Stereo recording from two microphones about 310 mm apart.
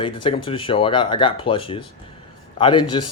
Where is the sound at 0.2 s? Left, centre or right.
Centre.